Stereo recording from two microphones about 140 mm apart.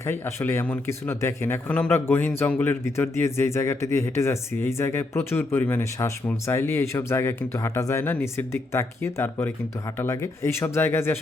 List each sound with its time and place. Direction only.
0.0 s speech: 20° left (ahead or behind)